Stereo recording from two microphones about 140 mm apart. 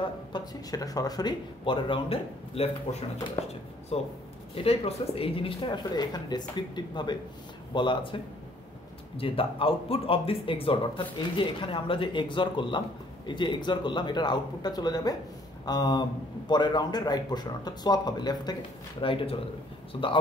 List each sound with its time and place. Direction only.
0.0 s a man's voice: 30° left (ahead or behind)